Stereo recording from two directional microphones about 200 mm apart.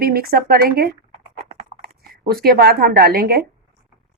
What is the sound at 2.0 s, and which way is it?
A woman's voice, 50° right (ahead or behind).